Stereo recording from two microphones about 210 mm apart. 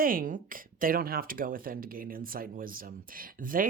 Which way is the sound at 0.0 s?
40° right (ahead or behind).